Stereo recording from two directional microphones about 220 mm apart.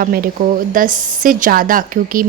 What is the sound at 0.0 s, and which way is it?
A woman's voice, 40° right (ahead or behind).